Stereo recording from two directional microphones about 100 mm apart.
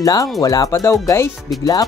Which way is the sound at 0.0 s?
40° left (ahead or behind).